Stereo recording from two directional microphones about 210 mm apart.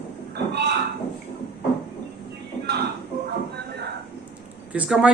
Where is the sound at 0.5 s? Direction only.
55° right (ahead or behind).